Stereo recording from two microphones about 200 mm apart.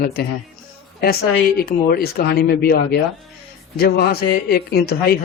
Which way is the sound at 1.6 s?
50° left (ahead or behind).